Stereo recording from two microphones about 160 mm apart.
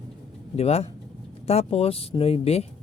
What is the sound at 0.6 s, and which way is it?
Speech, 40° left (ahead or behind).